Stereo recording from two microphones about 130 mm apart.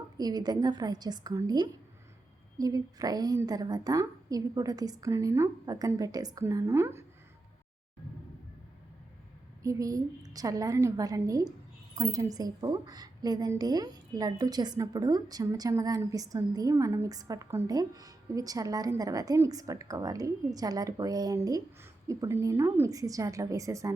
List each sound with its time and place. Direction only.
0.2 s a woman's voice: 30° right (ahead or behind)
9.6 s a woman's voice: 25° right (ahead or behind)